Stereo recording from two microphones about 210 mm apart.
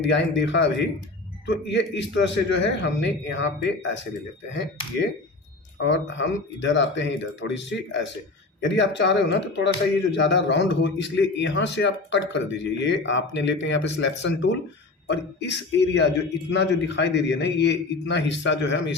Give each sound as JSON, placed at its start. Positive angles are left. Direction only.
{"t": 0.0, "sound": "speech", "side_deg": 60}
{"t": 5.7, "sound": "speech", "side_deg": 60}